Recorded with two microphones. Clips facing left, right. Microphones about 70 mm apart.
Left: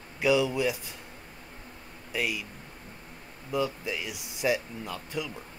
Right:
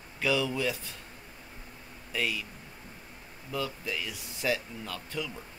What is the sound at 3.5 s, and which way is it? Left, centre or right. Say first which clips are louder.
Speech: left 4 dB; centre.